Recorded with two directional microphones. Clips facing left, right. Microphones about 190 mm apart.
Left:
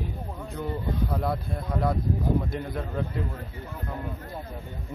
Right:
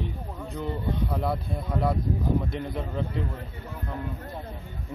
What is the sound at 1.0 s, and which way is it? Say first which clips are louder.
Speech: even; centre (ahead or behind).